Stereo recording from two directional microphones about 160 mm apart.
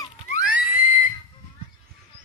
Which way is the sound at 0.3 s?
50° left (ahead or behind).